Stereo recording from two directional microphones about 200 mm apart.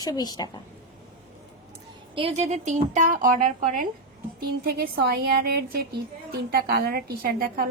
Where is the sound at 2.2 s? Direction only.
35° right (ahead or behind).